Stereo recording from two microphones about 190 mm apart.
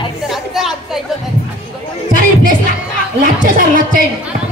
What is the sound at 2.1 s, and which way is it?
Music, 45° right (ahead or behind).